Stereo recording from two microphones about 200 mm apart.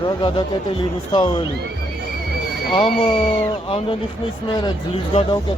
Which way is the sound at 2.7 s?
25° left (ahead or behind).